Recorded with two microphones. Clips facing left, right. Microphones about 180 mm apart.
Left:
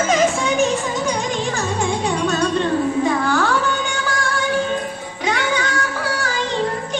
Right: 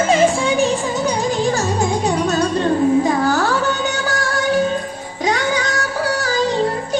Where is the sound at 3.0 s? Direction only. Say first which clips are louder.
Right 2 dB; 35° right (ahead or behind).